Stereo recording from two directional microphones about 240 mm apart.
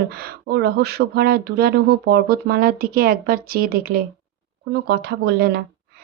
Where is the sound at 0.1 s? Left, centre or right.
Right.